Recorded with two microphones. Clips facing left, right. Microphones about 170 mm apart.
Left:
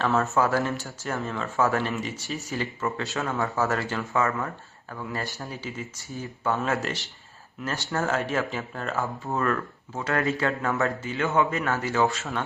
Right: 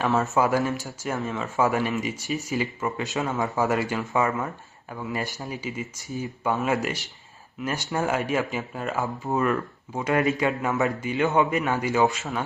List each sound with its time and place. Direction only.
0.2 s speech: 15° right (ahead or behind)